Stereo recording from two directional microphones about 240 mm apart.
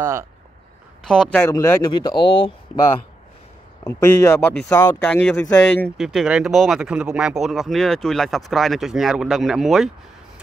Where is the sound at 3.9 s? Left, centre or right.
Centre.